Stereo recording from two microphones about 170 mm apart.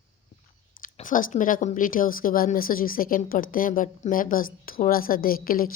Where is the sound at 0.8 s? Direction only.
50° left (ahead or behind).